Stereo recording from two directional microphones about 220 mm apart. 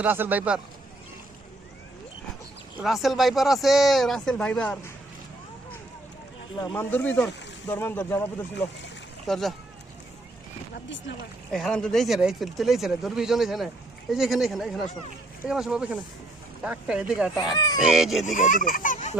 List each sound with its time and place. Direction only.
0.0 s a man's voice: 10° right (ahead or behind)
2.7 s speech: centre (ahead or behind)
6.7 s speech: 10° left (ahead or behind)
11.5 s speech: centre (ahead or behind)
17.5 s speech: 15° left (ahead or behind)
17.7 s speech: centre (ahead or behind)
18.3 s speech: 35° left (ahead or behind)